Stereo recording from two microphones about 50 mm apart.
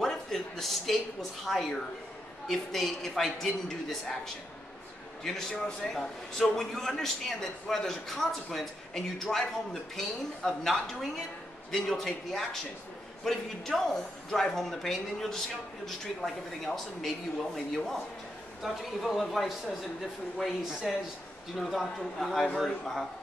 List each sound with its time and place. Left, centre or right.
0.0 s a sound: centre
1.4 s a man's voice: centre
5.2 s speech: centre
18.6 s a man's voice: centre